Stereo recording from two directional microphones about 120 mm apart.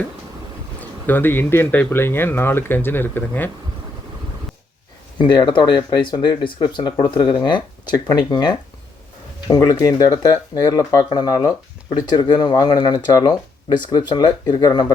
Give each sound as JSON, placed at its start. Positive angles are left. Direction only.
{"t": 0.8, "sound": "speech", "side_deg": 15}
{"t": 5.2, "sound": "speech", "side_deg": 40}